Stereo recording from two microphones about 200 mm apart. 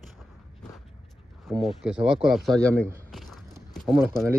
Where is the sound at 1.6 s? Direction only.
5° right (ahead or behind).